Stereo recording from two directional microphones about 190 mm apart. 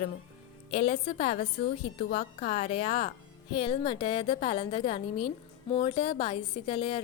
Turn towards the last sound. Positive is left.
turn(degrees=25)  # may be behind; listen again after turning